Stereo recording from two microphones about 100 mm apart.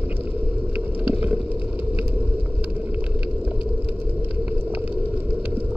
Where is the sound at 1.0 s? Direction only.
15° right (ahead or behind).